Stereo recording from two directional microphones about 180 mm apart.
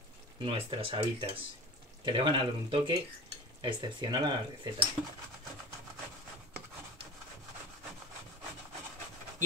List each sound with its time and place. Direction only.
0.4 s speech: 25° right (ahead or behind)